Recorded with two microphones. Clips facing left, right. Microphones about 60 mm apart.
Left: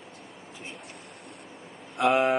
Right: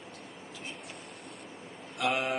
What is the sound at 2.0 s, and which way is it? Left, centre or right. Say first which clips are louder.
Speech: left 8 dB; left.